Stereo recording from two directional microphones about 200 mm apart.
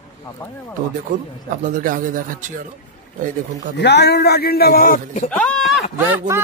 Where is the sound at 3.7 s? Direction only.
55° left (ahead or behind).